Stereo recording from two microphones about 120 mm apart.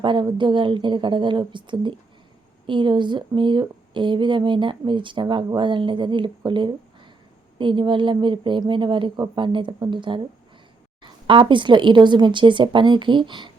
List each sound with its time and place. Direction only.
0.0 s speech: 45° right (ahead or behind)
11.3 s a woman's voice: 40° right (ahead or behind)